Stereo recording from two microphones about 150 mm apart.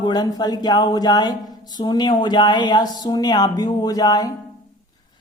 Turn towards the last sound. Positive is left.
turn(degrees=25)  # may be behind; listen again after turning